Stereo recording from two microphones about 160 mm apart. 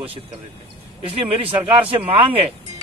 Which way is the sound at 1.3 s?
35° right (ahead or behind).